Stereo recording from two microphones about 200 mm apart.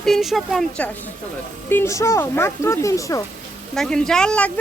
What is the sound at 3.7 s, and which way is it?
Speech, 5° left (ahead or behind).